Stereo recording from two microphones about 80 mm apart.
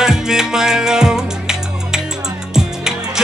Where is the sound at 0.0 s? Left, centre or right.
Centre.